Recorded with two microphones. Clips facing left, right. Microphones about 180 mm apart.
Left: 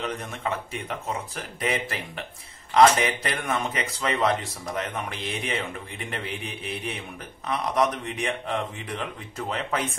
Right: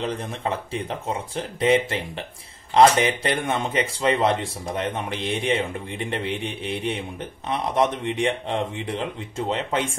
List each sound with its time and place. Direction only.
0.0 s speech: 30° right (ahead or behind)